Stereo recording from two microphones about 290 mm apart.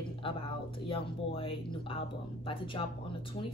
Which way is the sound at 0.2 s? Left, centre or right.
Centre.